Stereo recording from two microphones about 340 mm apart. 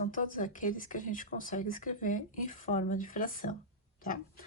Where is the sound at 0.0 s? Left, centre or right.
Left.